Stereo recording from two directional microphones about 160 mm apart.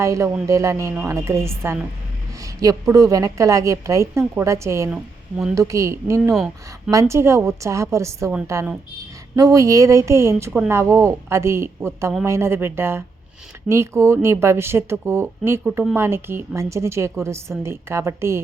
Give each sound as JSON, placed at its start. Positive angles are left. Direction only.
{"t": 0.0, "sound": "a woman's voice", "side_deg": -20}
{"t": 6.3, "sound": "speech", "side_deg": 0}
{"t": 6.9, "sound": "a woman's voice", "side_deg": -15}
{"t": 15.6, "sound": "speech", "side_deg": -5}
{"t": 16.0, "sound": "speech", "side_deg": -15}